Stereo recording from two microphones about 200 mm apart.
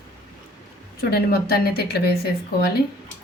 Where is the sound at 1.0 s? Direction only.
50° left (ahead or behind).